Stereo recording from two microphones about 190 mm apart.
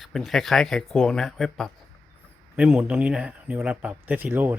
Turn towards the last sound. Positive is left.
turn(degrees=-10)  # may be behind; listen again after turning